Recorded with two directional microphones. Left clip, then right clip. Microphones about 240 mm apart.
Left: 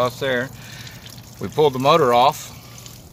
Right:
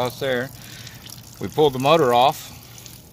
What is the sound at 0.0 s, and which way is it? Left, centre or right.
Speech, centre.